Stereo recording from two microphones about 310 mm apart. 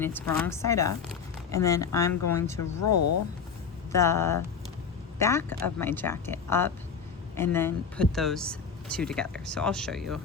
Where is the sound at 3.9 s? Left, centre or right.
Centre.